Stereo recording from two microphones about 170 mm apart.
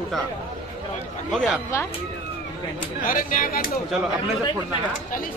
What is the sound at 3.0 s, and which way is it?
Speech, 55° left (ahead or behind).